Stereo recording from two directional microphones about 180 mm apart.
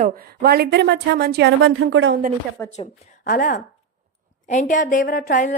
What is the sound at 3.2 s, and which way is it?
A woman's voice, 50° left (ahead or behind).